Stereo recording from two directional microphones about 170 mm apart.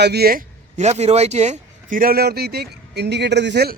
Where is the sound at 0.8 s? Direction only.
40° right (ahead or behind); by 3.8 s 75° right (ahead or behind).